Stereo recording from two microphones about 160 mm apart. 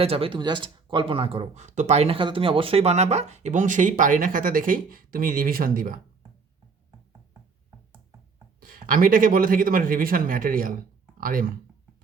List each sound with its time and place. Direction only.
0.0 s speech: 35° right (ahead or behind); by 6.0 s 60° right (ahead or behind)
8.6 s speech: 65° right (ahead or behind)